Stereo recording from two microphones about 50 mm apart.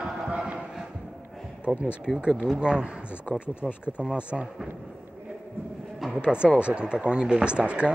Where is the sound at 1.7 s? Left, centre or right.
Centre.